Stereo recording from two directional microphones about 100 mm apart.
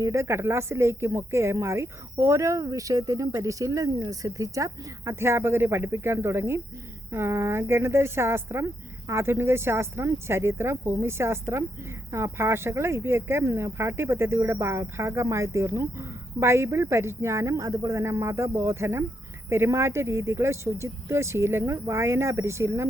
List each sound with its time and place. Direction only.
0.0 s speech: 30° right (ahead or behind)